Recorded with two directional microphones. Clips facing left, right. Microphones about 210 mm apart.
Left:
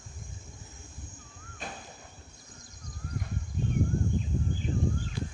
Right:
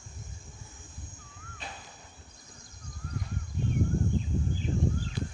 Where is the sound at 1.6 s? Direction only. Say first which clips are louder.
Left 3 dB; 50° left (ahead or behind).